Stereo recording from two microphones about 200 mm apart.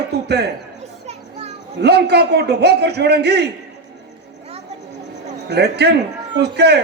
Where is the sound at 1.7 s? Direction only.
55° right (ahead or behind).